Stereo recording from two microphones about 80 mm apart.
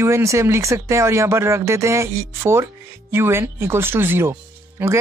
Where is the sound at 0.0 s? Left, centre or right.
Right.